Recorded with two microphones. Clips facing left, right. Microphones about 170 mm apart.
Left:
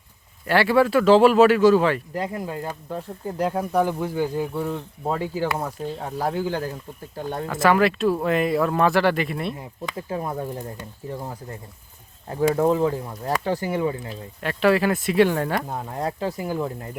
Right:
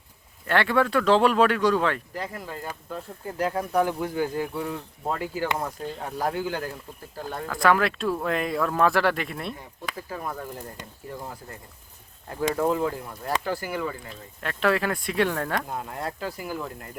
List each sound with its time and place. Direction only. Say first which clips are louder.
0.4 s speech: left 4 dB; 5° left (ahead or behind)
2.1 s speech: left 6 dB; 15° left (ahead or behind)
7.5 s speech: left 3 dB; centre (ahead or behind)
10.1 s speech: left 7 dB; 25° left (ahead or behind)
12.6 s speech: left 3 dB; 5° left (ahead or behind)
12.9 s speech: left 4 dB; 20° left (ahead or behind)
14.1 s speech: left 5 dB; 5° left (ahead or behind)
16.2 s speech: left 6 dB; 25° left (ahead or behind)